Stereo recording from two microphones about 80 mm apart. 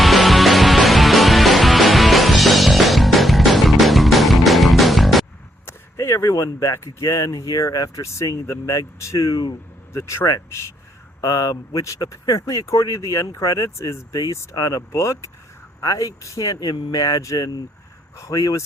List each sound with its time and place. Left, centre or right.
0.0 s music: centre
5.6 s speech: left
9.9 s speech: left